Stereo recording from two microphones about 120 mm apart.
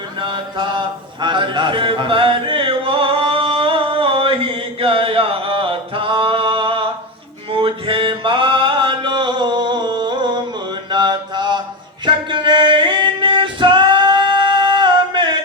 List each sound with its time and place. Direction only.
0.2 s a sound: 40° right (ahead or behind)
7.5 s music: 45° right (ahead or behind)
10.9 s mantra: 40° right (ahead or behind)
12.0 s music: 40° right (ahead or behind)